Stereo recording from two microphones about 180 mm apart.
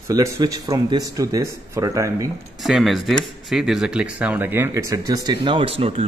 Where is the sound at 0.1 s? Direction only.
20° right (ahead or behind).